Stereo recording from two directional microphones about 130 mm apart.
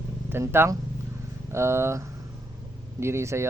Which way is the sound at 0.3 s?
20° right (ahead or behind).